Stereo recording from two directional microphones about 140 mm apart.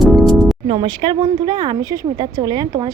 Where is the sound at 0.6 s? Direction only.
40° right (ahead or behind).